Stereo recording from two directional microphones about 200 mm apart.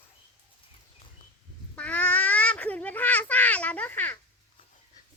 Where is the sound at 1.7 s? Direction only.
5° left (ahead or behind).